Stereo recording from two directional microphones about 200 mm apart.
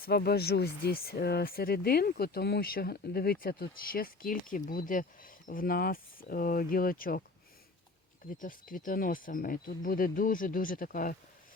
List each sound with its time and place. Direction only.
0.0 s speech: 50° left (ahead or behind)
8.4 s speech: 45° left (ahead or behind)